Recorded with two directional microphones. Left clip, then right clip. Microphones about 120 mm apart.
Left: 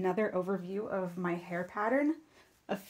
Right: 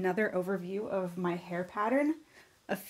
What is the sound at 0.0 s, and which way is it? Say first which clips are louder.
Speech: right 1 dB; 15° right (ahead or behind).